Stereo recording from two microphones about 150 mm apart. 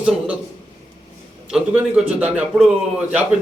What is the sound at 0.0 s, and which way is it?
Speech, 10° right (ahead or behind).